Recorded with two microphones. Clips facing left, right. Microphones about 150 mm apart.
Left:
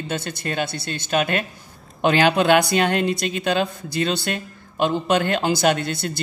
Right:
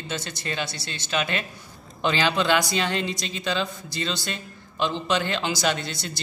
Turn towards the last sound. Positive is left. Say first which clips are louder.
# left 6 dB
turn(degrees=55)  # may be behind; listen again after turning